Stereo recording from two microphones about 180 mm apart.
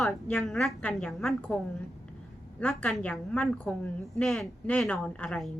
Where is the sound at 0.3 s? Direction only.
5° left (ahead or behind).